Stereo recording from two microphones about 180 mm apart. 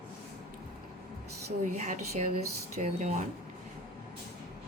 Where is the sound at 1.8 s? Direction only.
40° right (ahead or behind).